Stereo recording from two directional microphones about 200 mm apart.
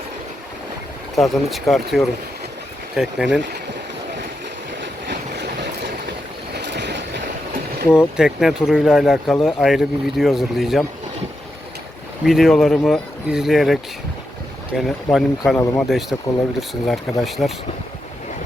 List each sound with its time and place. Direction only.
1.1 s speech: centre (ahead or behind)
4.8 s vehicle: 60° right (ahead or behind)
6.5 s vehicle: 60° right (ahead or behind)
7.9 s speech: 5° right (ahead or behind)
12.2 s speech: centre (ahead or behind)
14.8 s speech: centre (ahead or behind)
15.5 s speech: 15° left (ahead or behind)
15.9 s speech: centre (ahead or behind)